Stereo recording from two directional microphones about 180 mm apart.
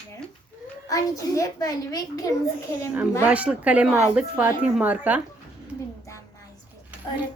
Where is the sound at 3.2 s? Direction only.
10° right (ahead or behind).